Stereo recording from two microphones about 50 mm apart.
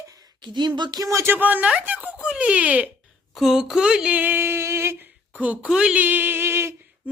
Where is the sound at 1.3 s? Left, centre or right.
Right.